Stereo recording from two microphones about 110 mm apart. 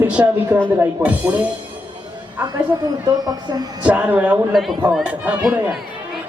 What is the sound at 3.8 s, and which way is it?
Speech, 10° right (ahead or behind).